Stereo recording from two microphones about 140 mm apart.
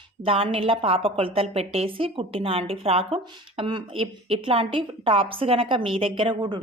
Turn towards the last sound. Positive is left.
turn(degrees=-30)  # may be behind; listen again after turning